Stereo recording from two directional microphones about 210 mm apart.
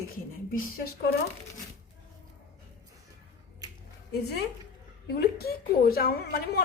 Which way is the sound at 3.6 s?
15° right (ahead or behind).